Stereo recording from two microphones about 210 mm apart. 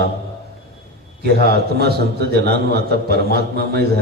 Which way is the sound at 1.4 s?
50° right (ahead or behind).